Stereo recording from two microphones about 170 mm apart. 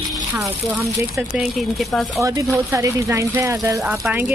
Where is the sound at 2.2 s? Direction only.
20° right (ahead or behind).